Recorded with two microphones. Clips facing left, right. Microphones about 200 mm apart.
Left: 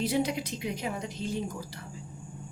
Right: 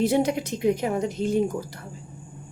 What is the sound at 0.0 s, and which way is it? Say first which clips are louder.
A woman's voice: right 7 dB; 50° right (ahead or behind).